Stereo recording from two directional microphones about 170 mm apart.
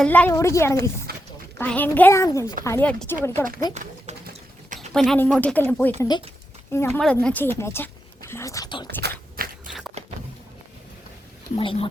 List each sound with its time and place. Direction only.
0.0 s a woman's voice: 10° left (ahead or behind)
1.1 s a sound: 65° right (ahead or behind)
1.5 s a woman's voice: 10° left (ahead or behind)
3.6 s speech: 25° left (ahead or behind)
4.9 s a woman's voice: 5° left (ahead or behind)
6.0 s speech: 25° left (ahead or behind)
6.7 s a woman's voice: 15° left (ahead or behind)
8.3 s whispering: 15° left (ahead or behind)
9.0 s biting: 65° right (ahead or behind)
11.5 s speech: 30° left (ahead or behind)